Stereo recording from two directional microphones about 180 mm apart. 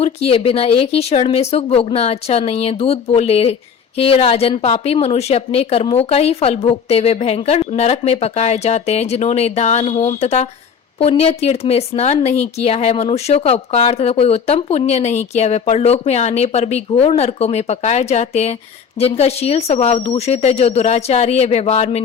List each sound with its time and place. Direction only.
0.0 s speech: 35° left (ahead or behind)